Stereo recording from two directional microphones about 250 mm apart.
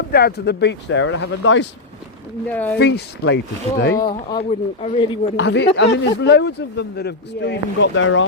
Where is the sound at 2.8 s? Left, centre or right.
Left.